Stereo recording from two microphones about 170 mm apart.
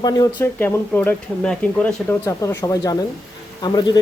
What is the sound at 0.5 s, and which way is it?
Speech, 10° left (ahead or behind).